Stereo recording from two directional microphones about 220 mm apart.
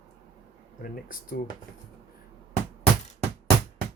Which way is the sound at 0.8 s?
40° left (ahead or behind).